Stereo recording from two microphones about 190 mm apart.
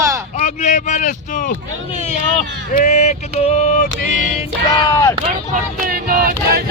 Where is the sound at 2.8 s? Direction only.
35° left (ahead or behind).